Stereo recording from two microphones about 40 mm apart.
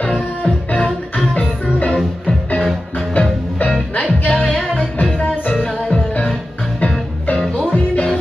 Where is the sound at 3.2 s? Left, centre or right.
Left.